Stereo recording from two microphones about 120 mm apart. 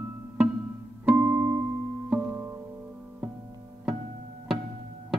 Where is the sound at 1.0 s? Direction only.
15° right (ahead or behind).